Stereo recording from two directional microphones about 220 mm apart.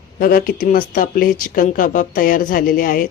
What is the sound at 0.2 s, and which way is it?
A woman's voice, 40° left (ahead or behind).